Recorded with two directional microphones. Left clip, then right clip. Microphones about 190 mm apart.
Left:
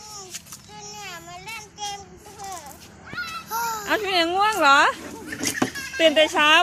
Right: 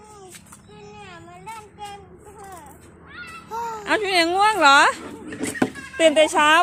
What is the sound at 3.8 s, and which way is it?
Speech, 20° right (ahead or behind).